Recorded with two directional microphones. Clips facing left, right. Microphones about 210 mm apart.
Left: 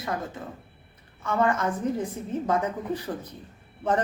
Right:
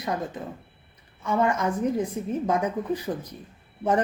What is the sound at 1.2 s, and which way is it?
A woman's voice, 10° right (ahead or behind).